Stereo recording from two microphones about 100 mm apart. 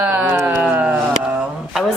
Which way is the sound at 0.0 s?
15° right (ahead or behind).